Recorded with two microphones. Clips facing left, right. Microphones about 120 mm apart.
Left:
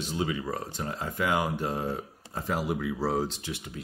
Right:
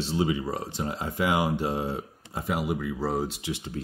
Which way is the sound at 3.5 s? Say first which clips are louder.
Right 4 dB; 25° right (ahead or behind).